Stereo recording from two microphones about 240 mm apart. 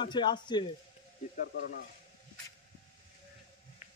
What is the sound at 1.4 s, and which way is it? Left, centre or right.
Speech, left.